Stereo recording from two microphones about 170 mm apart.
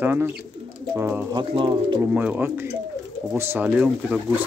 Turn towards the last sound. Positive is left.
turn(degrees=-5)  # may be behind; listen again after turning